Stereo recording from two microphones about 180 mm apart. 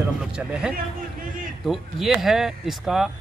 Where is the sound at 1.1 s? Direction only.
50° right (ahead or behind).